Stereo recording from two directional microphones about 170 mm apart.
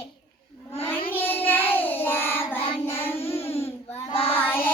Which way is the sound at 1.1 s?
10° left (ahead or behind).